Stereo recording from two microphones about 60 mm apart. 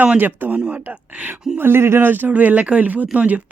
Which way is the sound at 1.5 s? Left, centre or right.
Right.